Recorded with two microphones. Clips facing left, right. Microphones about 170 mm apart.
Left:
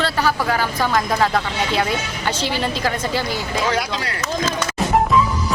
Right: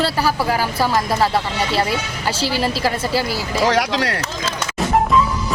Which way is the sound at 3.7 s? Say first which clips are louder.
Right 4 dB; 85° right.